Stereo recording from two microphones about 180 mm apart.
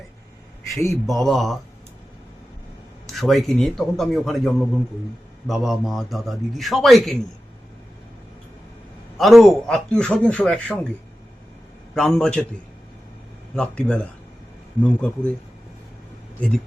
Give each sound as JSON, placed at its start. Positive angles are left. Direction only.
{"t": 0.7, "sound": "a man's voice", "side_deg": 15}
{"t": 1.0, "sound": "a man's voice", "side_deg": 0}
{"t": 3.1, "sound": "a man's voice", "side_deg": 0}
{"t": 9.1, "sound": "a man's voice", "side_deg": 0}
{"t": 11.9, "sound": "a man's voice", "side_deg": 5}
{"t": 13.6, "sound": "a man's voice", "side_deg": 5}